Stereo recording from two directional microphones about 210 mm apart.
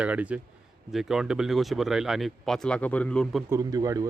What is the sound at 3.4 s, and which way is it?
Speech, 15° right (ahead or behind).